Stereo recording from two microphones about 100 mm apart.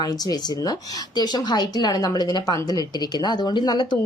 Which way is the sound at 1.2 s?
40° left (ahead or behind).